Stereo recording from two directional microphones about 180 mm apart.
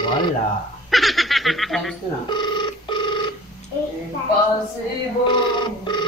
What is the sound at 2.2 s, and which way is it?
Telephone, 25° left (ahead or behind).